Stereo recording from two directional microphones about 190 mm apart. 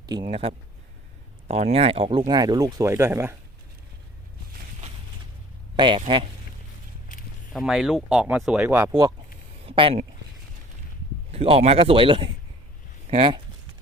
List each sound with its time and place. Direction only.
0.0 s speech: 20° right (ahead or behind)
5.7 s speech: 25° right (ahead or behind)
7.5 s speech: centre (ahead or behind)
8.7 s speech: 15° right (ahead or behind)
9.6 s speech: 30° right (ahead or behind)
11.3 s speech: 30° right (ahead or behind)